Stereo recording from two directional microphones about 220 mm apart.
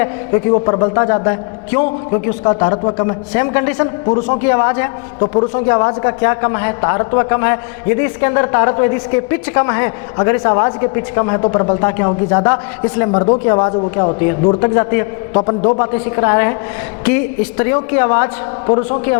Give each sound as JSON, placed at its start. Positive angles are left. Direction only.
{"t": 0.5, "sound": "a man's voice", "side_deg": 25}
{"t": 4.0, "sound": "a man's voice", "side_deg": 25}
{"t": 4.4, "sound": "a man's voice", "side_deg": 15}
{"t": 5.2, "sound": "a man's voice", "side_deg": 25}
{"t": 15.4, "sound": "a man's voice", "side_deg": 25}